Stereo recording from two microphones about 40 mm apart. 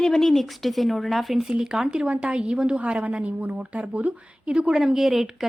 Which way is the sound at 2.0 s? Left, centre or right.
Right.